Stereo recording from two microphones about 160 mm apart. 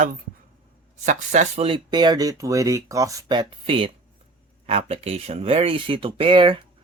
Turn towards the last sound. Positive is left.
turn(degrees=-30)  # may be behind; listen again after turning